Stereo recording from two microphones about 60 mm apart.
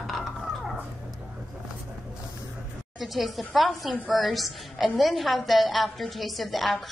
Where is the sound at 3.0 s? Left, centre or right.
Centre.